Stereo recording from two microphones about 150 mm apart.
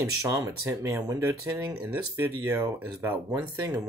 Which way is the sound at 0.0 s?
20° right (ahead or behind).